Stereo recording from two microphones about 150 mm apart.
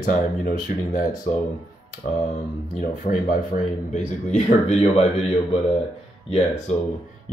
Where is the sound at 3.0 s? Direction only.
60° left (ahead or behind); by 5.2 s 45° left (ahead or behind).